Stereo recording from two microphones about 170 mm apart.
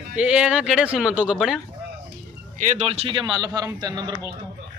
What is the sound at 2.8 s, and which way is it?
A man's voice, 35° right (ahead or behind).